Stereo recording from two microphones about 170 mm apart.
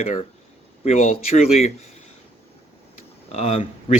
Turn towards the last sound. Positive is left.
turn(degrees=35)  # may be behind; listen again after turning